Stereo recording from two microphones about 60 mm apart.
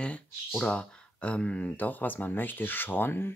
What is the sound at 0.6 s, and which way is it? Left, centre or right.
Speech, centre.